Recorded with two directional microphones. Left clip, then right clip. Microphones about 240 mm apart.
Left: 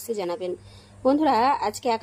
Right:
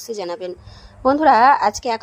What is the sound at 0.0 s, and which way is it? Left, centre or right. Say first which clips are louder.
A woman's voice: right 2 dB; centre.